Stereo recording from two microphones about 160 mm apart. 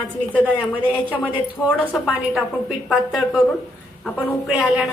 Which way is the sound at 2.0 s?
5° right (ahead or behind).